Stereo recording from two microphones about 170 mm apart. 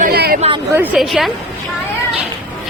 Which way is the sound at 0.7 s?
10° right (ahead or behind).